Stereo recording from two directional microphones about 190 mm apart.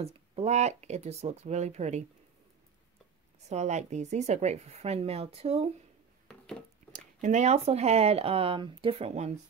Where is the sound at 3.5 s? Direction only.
35° right (ahead or behind).